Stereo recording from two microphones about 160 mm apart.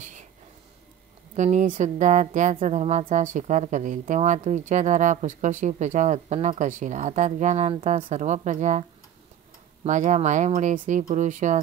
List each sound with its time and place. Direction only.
1.3 s speech: 50° right (ahead or behind)
9.8 s speech: 50° right (ahead or behind)